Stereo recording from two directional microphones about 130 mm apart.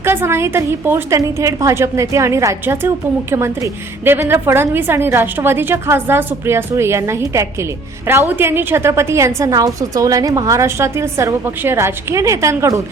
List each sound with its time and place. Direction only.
0.0 s a woman's voice: 20° right (ahead or behind)